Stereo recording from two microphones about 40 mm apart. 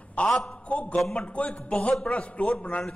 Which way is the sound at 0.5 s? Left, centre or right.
Left.